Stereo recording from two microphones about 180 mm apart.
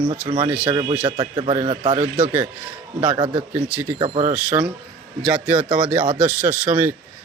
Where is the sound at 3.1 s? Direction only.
35° right (ahead or behind).